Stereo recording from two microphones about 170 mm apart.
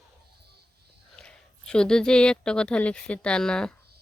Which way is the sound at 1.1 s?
5° left (ahead or behind).